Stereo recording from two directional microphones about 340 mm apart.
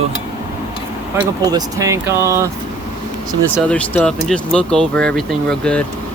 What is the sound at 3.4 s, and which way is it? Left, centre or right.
Speech, centre.